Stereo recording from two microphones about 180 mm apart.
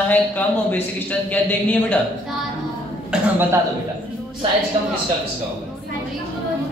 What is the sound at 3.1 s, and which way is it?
Speech, 10° right (ahead or behind).